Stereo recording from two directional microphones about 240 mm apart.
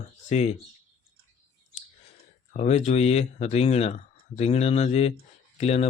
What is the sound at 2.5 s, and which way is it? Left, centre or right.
Speech, left.